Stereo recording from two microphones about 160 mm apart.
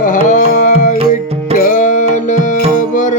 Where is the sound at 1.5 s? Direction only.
55° left (ahead or behind).